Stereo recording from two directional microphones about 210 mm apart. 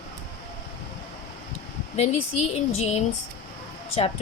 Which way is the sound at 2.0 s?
30° left (ahead or behind).